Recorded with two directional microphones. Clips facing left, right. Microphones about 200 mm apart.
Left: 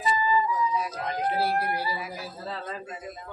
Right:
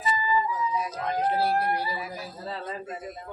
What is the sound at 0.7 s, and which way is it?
Emergency vehicle, 15° right (ahead or behind).